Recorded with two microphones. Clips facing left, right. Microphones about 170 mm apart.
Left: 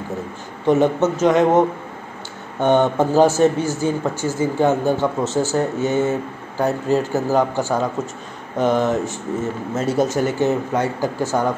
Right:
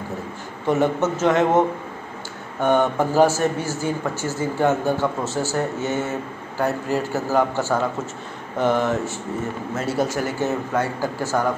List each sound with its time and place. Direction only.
0.7 s speech: 15° left (ahead or behind)
2.6 s speech: 25° left (ahead or behind)